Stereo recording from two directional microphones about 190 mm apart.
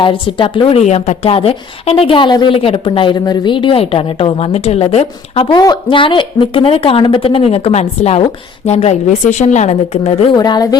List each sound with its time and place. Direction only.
0.0 s a woman's voice: 25° left (ahead or behind)